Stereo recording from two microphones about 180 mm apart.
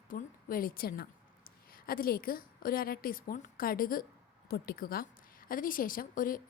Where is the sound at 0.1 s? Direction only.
50° left (ahead or behind).